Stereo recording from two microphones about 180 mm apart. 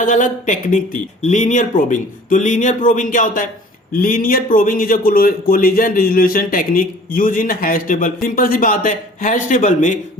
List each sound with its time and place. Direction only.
0.0 s speech: 45° left (ahead or behind)